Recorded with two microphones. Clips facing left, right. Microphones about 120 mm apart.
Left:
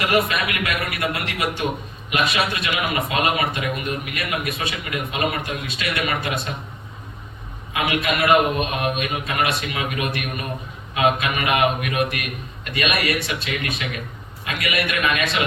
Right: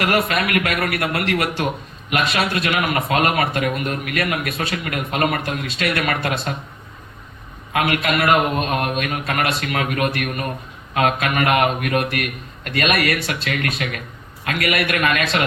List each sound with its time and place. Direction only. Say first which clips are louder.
0.0 s a man's voice: right 1 dB; 60° right (ahead or behind)
7.7 s a man's voice: right 3 dB; 60° right (ahead or behind)